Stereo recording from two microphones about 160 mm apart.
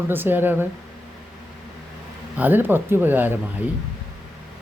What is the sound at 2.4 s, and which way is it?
Speech, 10° right (ahead or behind).